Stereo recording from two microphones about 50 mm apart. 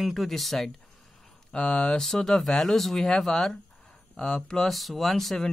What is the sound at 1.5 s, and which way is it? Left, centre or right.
Speech, centre.